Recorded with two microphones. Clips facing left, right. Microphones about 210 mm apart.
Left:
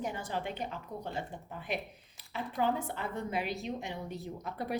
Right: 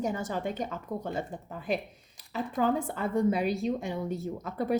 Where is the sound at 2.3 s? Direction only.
40° right (ahead or behind).